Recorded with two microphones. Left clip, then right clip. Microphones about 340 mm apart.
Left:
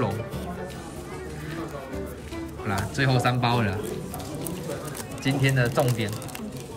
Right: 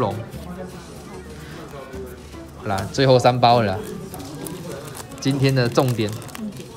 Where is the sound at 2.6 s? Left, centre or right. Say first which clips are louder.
Right 8 dB; centre.